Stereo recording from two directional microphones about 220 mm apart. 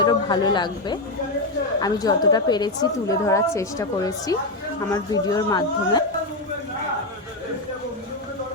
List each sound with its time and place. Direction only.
0.0 s a woman's voice: 20° left (ahead or behind)